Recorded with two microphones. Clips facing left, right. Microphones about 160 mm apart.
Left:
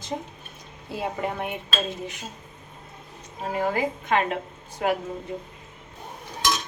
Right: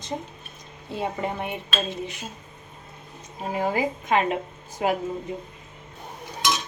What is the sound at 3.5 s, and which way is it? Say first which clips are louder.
Speech: even; 10° right (ahead or behind).